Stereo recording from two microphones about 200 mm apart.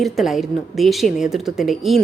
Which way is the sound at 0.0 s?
Centre (ahead or behind).